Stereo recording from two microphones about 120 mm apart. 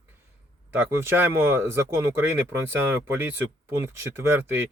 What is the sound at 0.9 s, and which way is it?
Speech, 20° right (ahead or behind).